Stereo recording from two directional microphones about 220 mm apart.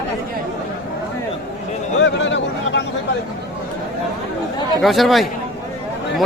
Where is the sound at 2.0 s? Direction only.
55° left (ahead or behind).